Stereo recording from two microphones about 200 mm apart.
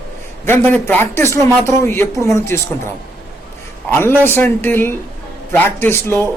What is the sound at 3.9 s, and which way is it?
A man's voice, 10° left (ahead or behind).